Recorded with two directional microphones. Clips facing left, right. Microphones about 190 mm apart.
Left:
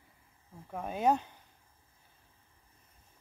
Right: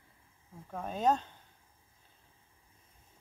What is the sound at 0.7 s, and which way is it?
Speech, 10° left (ahead or behind).